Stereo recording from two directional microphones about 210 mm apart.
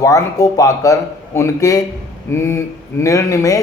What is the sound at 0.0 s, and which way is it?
Speech, 15° left (ahead or behind).